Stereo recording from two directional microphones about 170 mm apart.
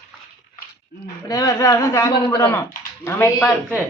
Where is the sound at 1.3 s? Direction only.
20° left (ahead or behind).